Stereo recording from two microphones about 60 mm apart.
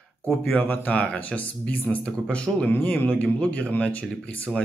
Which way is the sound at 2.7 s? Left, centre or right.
Left.